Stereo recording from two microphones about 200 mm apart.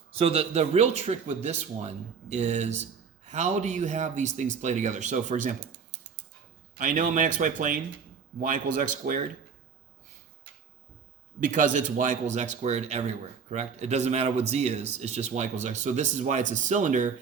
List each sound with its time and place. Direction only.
0.1 s speech: 30° right (ahead or behind)
6.7 s speech: 40° right (ahead or behind)
11.4 s speech: 40° right (ahead or behind)